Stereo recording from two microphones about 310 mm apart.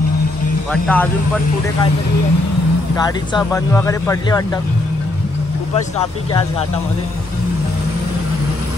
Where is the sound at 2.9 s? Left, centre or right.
Centre.